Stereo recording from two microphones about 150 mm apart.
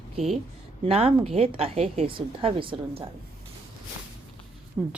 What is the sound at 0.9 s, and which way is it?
A woman's voice, 40° right (ahead or behind).